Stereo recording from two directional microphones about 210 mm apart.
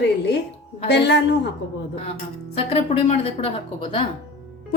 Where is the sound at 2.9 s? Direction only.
30° left (ahead or behind).